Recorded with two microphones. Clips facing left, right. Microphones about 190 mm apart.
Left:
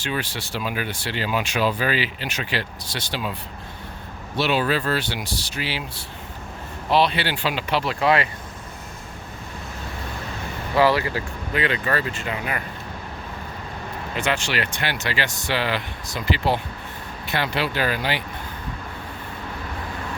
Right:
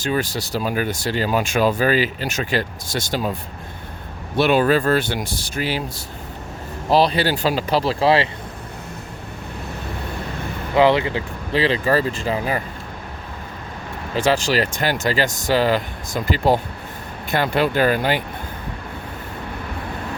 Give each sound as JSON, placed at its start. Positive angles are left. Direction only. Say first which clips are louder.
{"t": 0.0, "sound": "speech", "louder": "right 6 dB", "side_deg": -40}
{"t": 4.4, "sound": "speech", "louder": "right 6 dB", "side_deg": -50}
{"t": 6.9, "sound": "speech", "louder": "right 4 dB", "side_deg": -40}
{"t": 10.8, "sound": "speech", "louder": "right 3 dB", "side_deg": -20}
{"t": 14.3, "sound": "speech", "louder": "right 7 dB", "side_deg": -40}